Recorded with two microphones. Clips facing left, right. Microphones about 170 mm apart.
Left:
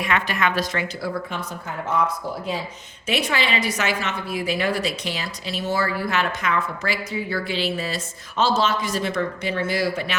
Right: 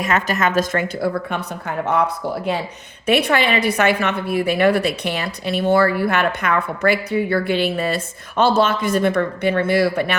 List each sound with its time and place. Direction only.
0.0 s a woman's voice: 40° right (ahead or behind); by 10.2 s 60° right (ahead or behind)